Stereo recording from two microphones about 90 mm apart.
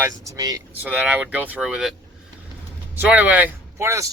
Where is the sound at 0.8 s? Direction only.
20° right (ahead or behind).